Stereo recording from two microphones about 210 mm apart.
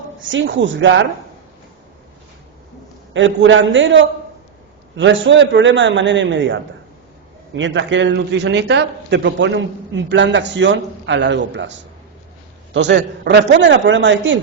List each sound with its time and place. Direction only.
0.2 s speech: 60° right (ahead or behind)
3.1 s speech: 65° right (ahead or behind)